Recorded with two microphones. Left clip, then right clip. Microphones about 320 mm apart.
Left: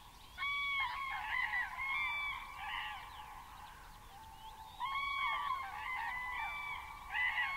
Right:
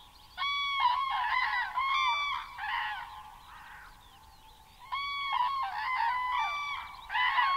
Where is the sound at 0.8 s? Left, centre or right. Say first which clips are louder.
Right 10 dB; right.